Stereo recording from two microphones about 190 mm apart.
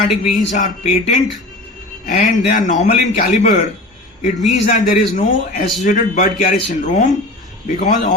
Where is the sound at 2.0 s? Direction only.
45° left (ahead or behind).